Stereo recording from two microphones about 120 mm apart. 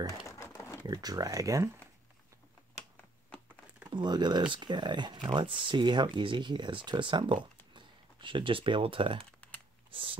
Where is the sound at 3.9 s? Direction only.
35° right (ahead or behind).